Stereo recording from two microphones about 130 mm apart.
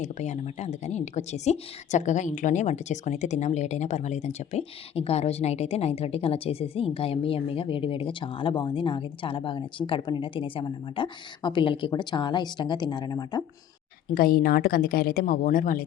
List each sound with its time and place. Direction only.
0.0 s a woman's voice: 65° left (ahead or behind); by 13.4 s 30° left (ahead or behind)
14.1 s a woman's voice: 90° left